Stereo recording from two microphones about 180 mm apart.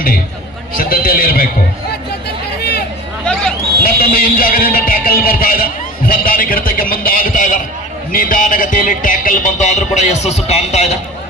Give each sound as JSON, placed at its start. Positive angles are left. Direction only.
{"t": 0.7, "sound": "speech", "side_deg": 55}
{"t": 3.8, "sound": "speech", "side_deg": 55}